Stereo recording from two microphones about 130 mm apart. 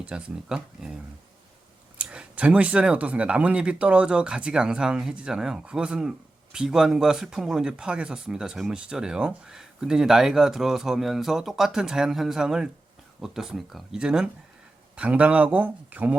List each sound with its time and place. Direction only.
0.0 s speech: 5° right (ahead or behind)
2.0 s speech: 10° right (ahead or behind)